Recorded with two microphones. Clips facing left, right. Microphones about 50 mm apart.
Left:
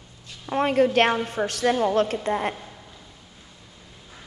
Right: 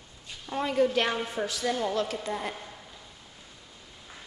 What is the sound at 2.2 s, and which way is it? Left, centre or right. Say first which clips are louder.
Speech: left 8 dB; left.